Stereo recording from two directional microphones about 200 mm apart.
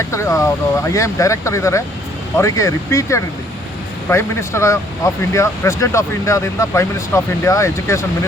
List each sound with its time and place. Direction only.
0.1 s speech: 15° left (ahead or behind)